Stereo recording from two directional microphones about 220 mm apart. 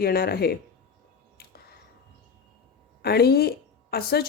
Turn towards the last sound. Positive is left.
turn(degrees=45)  # may be behind; listen again after turning